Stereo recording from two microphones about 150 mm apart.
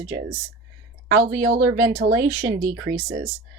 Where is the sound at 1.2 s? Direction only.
65° right (ahead or behind).